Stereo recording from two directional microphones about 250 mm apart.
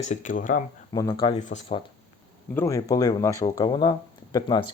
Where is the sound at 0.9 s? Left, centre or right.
Centre.